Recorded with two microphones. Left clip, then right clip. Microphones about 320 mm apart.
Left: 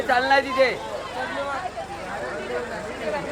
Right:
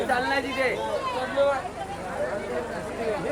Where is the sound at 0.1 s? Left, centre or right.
Centre.